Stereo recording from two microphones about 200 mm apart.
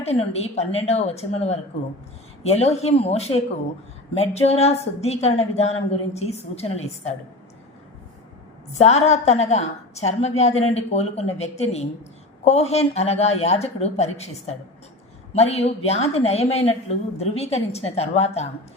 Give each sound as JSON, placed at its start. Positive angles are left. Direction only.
{"t": 0.0, "sound": "a woman's voice", "side_deg": 30}
{"t": 8.8, "sound": "a woman's voice", "side_deg": 30}